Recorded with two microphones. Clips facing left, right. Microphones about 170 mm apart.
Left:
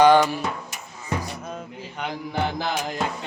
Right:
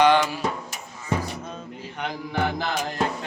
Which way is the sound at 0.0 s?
45° left (ahead or behind).